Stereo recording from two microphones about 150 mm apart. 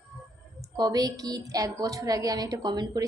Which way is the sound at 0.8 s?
25° right (ahead or behind).